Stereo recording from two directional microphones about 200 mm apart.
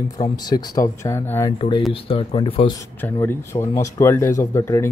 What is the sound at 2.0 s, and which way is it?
Speech, 25° left (ahead or behind).